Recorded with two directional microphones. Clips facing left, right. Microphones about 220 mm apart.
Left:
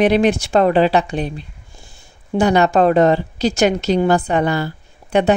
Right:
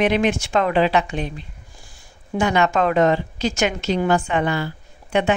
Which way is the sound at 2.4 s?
35° left (ahead or behind).